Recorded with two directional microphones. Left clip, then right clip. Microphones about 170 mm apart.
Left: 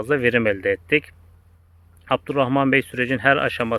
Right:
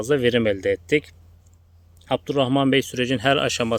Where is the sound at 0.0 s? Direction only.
35° right (ahead or behind).